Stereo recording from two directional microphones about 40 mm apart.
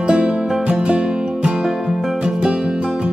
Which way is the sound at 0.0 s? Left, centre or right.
Right.